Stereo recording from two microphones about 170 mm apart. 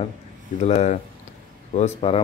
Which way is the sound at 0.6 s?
40° left (ahead or behind).